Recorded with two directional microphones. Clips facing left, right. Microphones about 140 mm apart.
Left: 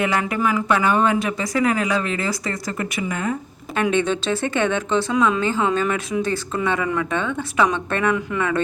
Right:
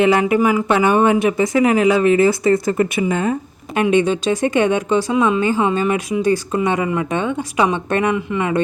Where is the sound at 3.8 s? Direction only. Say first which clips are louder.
Right 5 dB; 10° right (ahead or behind).